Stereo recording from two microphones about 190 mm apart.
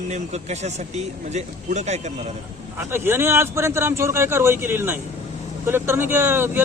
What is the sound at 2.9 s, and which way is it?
A man's voice, 10° right (ahead or behind).